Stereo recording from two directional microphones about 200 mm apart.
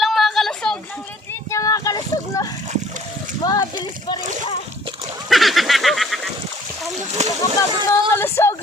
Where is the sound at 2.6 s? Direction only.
35° right (ahead or behind).